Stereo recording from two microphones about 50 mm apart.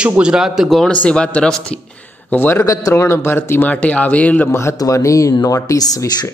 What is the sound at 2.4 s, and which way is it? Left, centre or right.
Speech, left.